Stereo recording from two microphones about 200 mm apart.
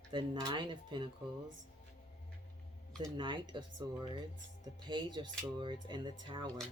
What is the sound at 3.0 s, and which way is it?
Speech, 25° right (ahead or behind).